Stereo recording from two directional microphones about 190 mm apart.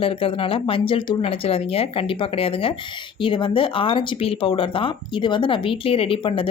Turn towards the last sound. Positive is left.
turn(degrees=30)  # may be behind; listen again after turning